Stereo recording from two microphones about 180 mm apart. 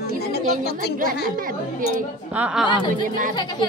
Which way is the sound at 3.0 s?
45° right (ahead or behind).